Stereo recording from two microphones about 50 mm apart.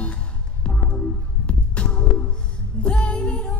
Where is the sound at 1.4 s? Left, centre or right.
Left.